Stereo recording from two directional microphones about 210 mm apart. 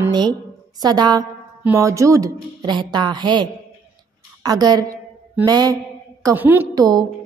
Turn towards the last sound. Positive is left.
turn(degrees=-20)  # may be behind; listen again after turning